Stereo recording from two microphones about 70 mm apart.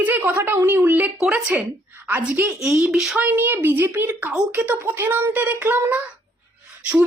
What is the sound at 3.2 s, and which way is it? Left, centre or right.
A woman's voice, right.